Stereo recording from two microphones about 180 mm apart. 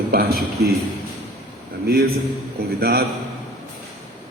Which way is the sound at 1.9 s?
60° right (ahead or behind).